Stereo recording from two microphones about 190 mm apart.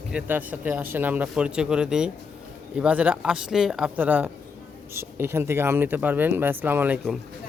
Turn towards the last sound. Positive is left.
turn(degrees=-5)  # may be behind; listen again after turning